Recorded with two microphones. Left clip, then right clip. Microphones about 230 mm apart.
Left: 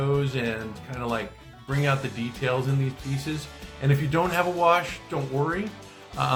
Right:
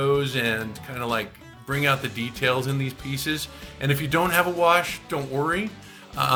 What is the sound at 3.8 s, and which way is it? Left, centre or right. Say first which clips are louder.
Speech: right 2 dB; right.